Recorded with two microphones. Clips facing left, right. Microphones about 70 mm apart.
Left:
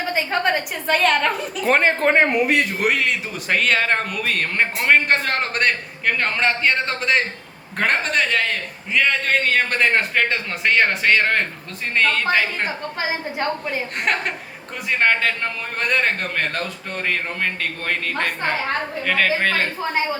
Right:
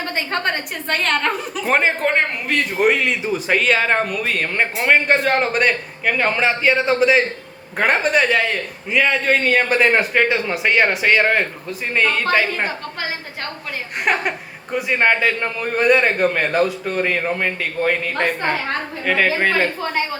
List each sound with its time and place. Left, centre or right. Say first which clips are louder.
0.0 s speech: left 1 dB; centre
2.0 s a man's voice: left 3 dB; centre
2.6 s speech: right 3 dB; centre
13.0 s a woman's voice: left 3 dB; centre
14.0 s speech: right 5 dB; centre